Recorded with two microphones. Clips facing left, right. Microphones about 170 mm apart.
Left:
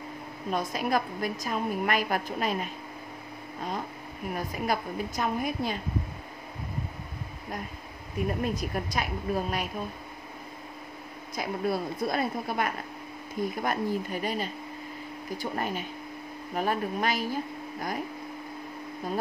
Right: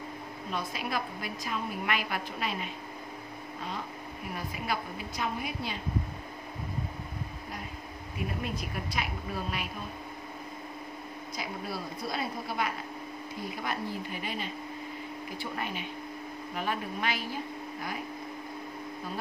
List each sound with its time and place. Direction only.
0.5 s a woman's voice: 45° left (ahead or behind)
4.4 s a woman's voice: 45° left (ahead or behind)
8.2 s a woman's voice: 40° left (ahead or behind)
11.3 s a woman's voice: 50° left (ahead or behind)